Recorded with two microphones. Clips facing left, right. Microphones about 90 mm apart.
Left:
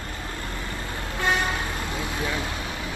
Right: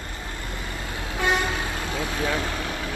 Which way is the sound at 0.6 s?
15° right (ahead or behind).